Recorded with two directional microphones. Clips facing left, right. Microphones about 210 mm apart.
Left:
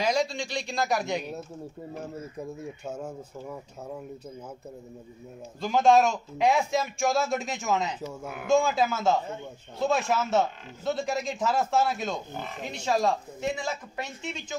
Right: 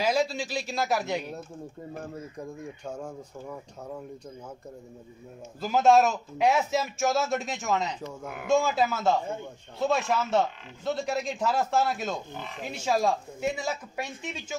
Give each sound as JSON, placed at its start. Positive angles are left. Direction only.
{"t": 0.0, "sound": "a man's voice", "side_deg": -5}
{"t": 2.3, "sound": "speech", "side_deg": 5}
{"t": 5.6, "sound": "a man's voice", "side_deg": -5}